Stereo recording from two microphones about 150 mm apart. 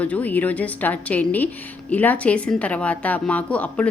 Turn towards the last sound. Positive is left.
turn(degrees=10)  # may be behind; listen again after turning